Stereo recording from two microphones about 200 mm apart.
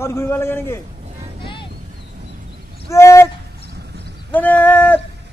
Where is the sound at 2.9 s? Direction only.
15° left (ahead or behind).